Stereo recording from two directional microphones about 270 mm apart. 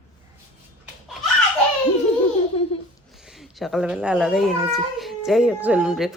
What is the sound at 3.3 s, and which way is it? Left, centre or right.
Speech, centre.